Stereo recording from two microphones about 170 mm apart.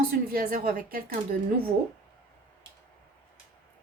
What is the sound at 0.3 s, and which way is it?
A woman's voice, 60° right (ahead or behind).